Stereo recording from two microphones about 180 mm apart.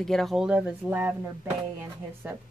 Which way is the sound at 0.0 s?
Centre (ahead or behind).